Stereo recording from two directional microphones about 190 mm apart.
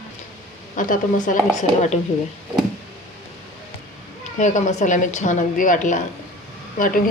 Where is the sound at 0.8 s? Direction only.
45° left (ahead or behind).